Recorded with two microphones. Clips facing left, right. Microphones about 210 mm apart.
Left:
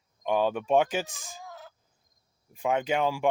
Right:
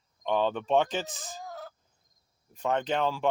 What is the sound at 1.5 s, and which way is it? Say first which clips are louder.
Fowl: right 4 dB; 40° right (ahead or behind).